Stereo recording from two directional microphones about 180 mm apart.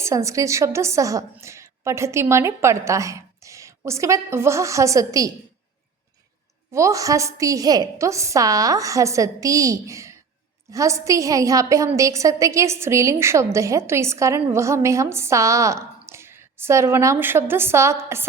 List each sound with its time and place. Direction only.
0.0 s a woman's voice: 15° right (ahead or behind)
6.7 s a woman's voice: 15° right (ahead or behind)